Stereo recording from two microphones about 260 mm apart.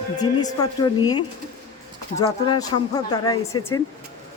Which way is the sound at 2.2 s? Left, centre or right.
Centre.